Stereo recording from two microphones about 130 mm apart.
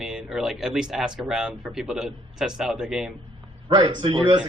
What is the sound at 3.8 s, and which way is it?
Speech, 35° right (ahead or behind).